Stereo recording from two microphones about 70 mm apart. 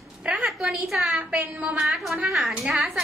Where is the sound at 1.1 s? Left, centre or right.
Right.